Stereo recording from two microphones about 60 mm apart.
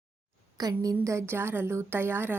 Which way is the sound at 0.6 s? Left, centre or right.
Right.